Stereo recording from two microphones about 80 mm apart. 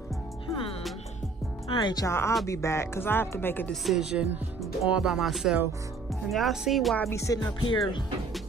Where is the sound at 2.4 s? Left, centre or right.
Left.